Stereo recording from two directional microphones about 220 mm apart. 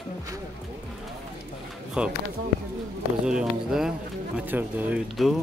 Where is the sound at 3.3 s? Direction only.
5° right (ahead or behind).